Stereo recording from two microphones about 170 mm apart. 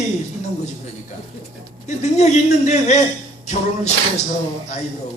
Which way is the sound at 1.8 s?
45° left (ahead or behind).